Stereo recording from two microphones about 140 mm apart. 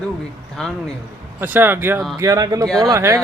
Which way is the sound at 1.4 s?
15° right (ahead or behind).